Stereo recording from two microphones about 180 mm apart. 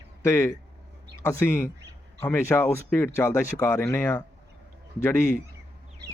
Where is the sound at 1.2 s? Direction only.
15° left (ahead or behind).